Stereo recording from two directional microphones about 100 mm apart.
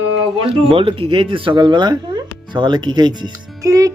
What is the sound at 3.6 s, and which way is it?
Speech, 35° right (ahead or behind).